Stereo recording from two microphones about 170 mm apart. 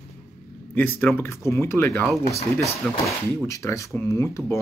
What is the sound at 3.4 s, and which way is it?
Speech, 20° left (ahead or behind).